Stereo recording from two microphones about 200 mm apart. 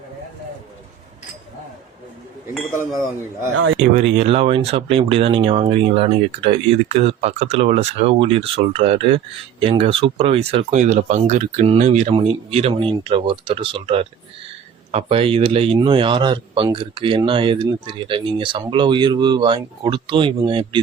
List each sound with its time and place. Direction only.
3.9 s speech: 30° right (ahead or behind)